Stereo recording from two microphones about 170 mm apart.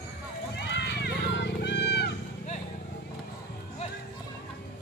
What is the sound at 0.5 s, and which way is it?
Run, 80° left.